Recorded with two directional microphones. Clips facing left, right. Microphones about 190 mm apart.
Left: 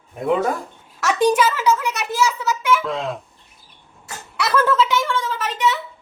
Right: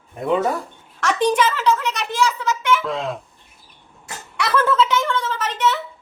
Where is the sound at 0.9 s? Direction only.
10° left (ahead or behind).